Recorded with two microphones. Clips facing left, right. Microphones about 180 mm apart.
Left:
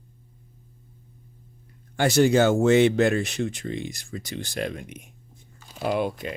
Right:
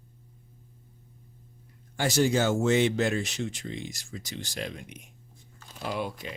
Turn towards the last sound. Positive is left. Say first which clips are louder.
# left 7 dB
turn(degrees=55)  # may be behind; listen again after turning